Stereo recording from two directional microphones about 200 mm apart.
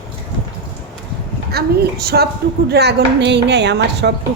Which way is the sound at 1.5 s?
50° right (ahead or behind).